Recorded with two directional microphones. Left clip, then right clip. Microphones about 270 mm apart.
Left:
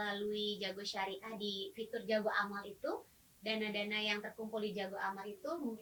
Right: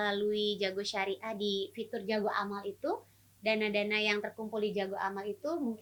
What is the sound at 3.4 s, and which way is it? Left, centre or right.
Speech, right.